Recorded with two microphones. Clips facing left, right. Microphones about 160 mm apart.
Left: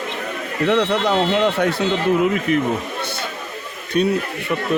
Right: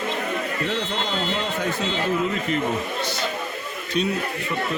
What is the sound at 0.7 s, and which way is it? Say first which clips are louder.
Speech: left 9 dB; 70° left (ahead or behind).